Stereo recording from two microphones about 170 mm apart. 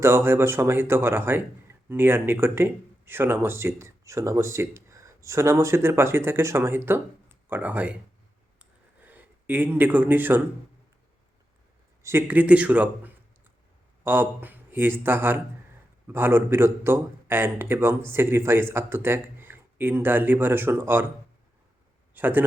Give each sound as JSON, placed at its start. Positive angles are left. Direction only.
{"t": 0.0, "sound": "speech", "side_deg": -15}
{"t": 9.0, "sound": "speech", "side_deg": -10}
{"t": 12.0, "sound": "speech", "side_deg": -10}
{"t": 22.1, "sound": "speech", "side_deg": -10}